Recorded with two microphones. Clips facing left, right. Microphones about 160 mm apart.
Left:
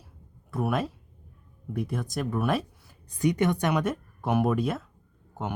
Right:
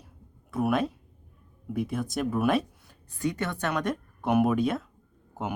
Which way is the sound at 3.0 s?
15° left (ahead or behind).